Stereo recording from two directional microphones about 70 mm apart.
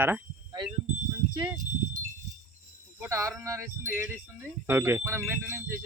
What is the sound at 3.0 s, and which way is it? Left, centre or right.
Speech, right.